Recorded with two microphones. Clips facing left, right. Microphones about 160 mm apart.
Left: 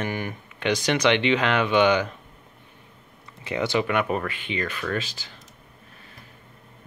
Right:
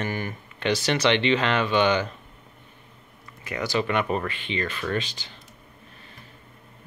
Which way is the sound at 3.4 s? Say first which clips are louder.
Left 2 dB; 25° left (ahead or behind).